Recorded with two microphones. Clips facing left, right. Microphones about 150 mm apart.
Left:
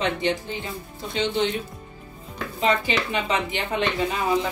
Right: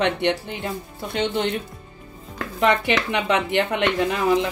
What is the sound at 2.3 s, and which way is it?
Speech, 70° right (ahead or behind).